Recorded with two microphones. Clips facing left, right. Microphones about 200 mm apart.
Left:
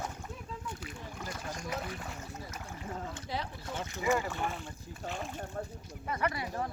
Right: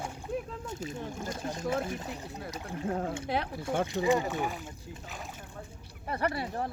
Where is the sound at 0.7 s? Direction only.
25° right (ahead or behind).